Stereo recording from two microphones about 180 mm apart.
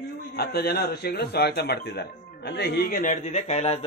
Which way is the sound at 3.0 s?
40° left (ahead or behind).